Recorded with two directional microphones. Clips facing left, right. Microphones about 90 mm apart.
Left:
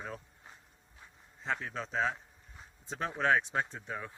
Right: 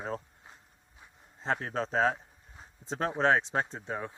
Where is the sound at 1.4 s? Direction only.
35° right (ahead or behind).